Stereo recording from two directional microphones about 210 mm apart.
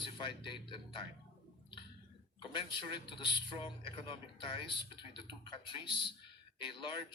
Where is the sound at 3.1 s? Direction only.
20° left (ahead or behind).